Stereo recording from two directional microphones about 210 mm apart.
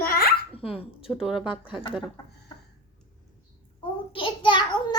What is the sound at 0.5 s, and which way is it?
Speech, 25° left (ahead or behind).